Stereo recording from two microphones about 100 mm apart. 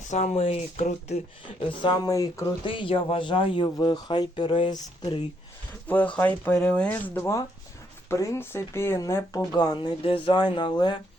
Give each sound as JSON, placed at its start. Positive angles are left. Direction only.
{"t": 0.2, "sound": "speech", "side_deg": 85}
{"t": 1.6, "sound": "speech", "side_deg": 55}
{"t": 2.0, "sound": "speech", "side_deg": 35}
{"t": 2.6, "sound": "speech", "side_deg": 60}
{"t": 3.8, "sound": "speech", "side_deg": 50}
{"t": 5.9, "sound": "speech", "side_deg": 15}
{"t": 9.6, "sound": "speech", "side_deg": 50}
{"t": 10.0, "sound": "speech", "side_deg": 60}